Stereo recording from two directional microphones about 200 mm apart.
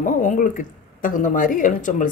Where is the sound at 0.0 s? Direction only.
40° left (ahead or behind).